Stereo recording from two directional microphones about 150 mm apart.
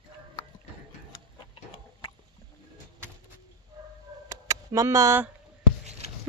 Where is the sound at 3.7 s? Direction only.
25° right (ahead or behind).